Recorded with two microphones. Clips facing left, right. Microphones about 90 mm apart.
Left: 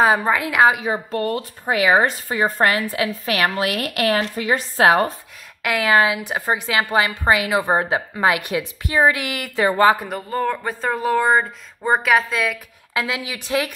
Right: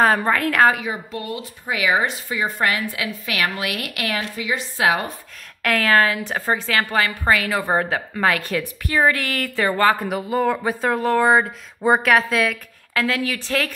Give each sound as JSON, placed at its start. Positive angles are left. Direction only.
{"t": 0.0, "sound": "a woman's voice", "side_deg": 10}
{"t": 0.8, "sound": "a woman's voice", "side_deg": 40}
{"t": 5.6, "sound": "a woman's voice", "side_deg": 10}
{"t": 9.9, "sound": "speech", "side_deg": -5}
{"t": 12.9, "sound": "a woman's voice", "side_deg": 15}